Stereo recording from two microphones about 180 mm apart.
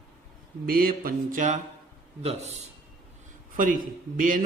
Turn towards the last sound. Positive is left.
turn(degrees=-50)  # may be behind; listen again after turning